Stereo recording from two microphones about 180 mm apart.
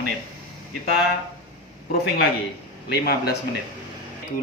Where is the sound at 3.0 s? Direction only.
65° left (ahead or behind).